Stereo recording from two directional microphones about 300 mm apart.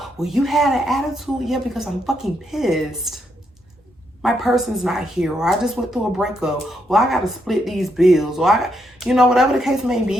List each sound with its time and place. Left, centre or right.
0.0 s a woman's voice: centre
4.2 s a woman's voice: centre